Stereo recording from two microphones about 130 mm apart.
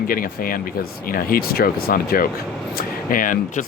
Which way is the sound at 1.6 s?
90° left.